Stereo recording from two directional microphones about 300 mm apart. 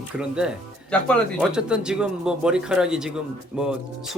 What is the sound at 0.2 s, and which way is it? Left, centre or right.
Speech, centre.